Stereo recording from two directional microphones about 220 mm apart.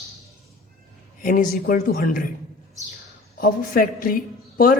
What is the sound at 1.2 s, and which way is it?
A man's voice, 40° left (ahead or behind).